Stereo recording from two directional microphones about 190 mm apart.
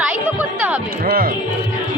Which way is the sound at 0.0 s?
5° right (ahead or behind).